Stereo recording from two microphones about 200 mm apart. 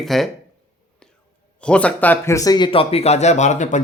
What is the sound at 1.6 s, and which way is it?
Speech, 5° left (ahead or behind).